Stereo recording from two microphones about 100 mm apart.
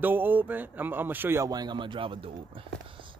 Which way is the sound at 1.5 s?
45° right (ahead or behind).